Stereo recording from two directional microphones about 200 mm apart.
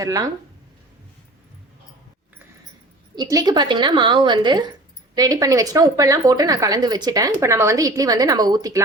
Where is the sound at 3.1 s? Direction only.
20° right (ahead or behind).